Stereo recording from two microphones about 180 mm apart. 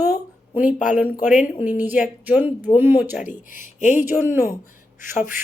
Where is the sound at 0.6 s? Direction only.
45° left (ahead or behind).